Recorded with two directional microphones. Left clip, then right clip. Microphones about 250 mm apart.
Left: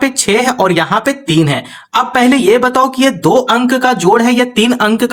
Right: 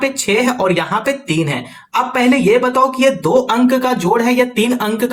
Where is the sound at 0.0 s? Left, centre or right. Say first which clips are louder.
Left 3 dB; left.